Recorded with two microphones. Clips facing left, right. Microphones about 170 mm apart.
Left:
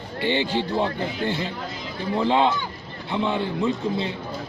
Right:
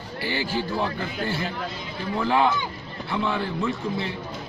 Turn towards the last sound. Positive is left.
turn(degrees=20)  # may be behind; listen again after turning